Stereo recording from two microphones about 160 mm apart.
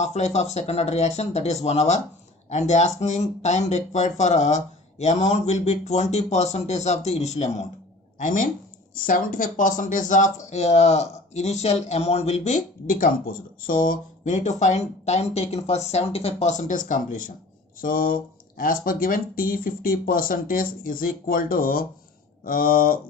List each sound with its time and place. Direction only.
0.0 s speech: 45° left (ahead or behind); by 23.0 s 65° left (ahead or behind)